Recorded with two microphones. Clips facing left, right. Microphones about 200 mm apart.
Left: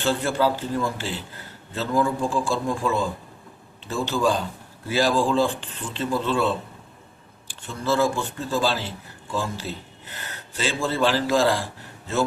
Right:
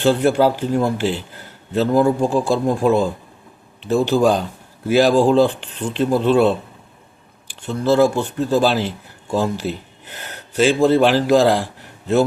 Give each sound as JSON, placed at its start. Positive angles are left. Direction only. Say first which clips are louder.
{"t": 0.0, "sound": "speech", "louder": "right 7 dB", "side_deg": -60}
{"t": 7.7, "sound": "speech", "louder": "right 7 dB", "side_deg": -65}
{"t": 9.2, "sound": "speech", "louder": "right 8 dB", "side_deg": -45}
{"t": 10.2, "sound": "a sound", "louder": "right 12 dB", "side_deg": -65}
{"t": 10.8, "sound": "speech", "louder": "right 5 dB", "side_deg": -60}